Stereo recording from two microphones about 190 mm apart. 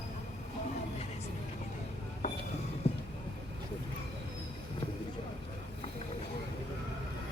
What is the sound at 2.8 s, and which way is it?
Vehicle, 30° left (ahead or behind).